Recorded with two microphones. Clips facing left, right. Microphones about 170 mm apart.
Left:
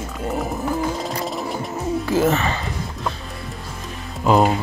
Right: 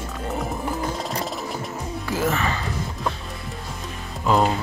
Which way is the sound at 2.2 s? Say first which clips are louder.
Left 1 dB; 25° left (ahead or behind).